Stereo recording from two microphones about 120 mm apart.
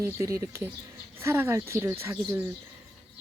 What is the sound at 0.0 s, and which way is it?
Speech, 25° right (ahead or behind).